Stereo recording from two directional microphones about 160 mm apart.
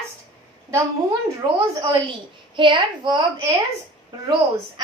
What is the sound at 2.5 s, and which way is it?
Speech, 30° right (ahead or behind).